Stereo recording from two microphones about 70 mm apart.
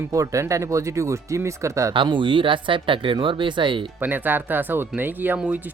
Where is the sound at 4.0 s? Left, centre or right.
Right.